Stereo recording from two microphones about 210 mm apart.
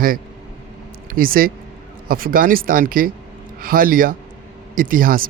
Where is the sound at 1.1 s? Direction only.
45° right (ahead or behind).